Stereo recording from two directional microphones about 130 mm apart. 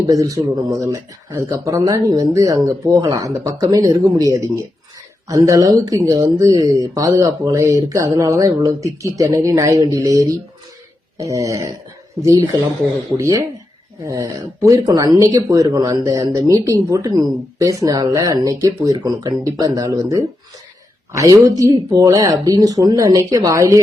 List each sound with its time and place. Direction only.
0.0 s speech: 25° right (ahead or behind)